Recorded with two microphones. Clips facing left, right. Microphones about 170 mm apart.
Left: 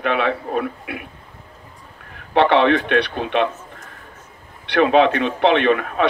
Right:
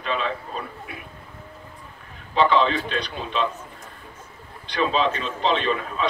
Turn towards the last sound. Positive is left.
turn(degrees=65)  # may be behind; listen again after turning